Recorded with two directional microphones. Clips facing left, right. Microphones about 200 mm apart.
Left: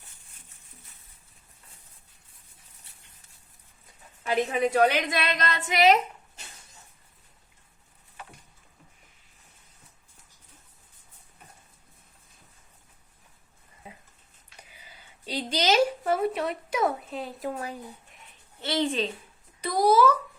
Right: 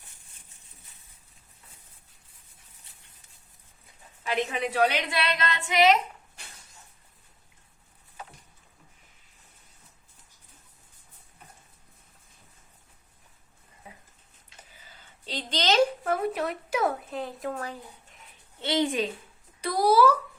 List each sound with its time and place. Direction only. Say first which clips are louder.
4.5 s a woman's voice: left 4 dB; 45° left (ahead or behind)
14.7 s speech: left 1 dB; 15° left (ahead or behind)
18.6 s a woman's voice: right 1 dB; 15° right (ahead or behind)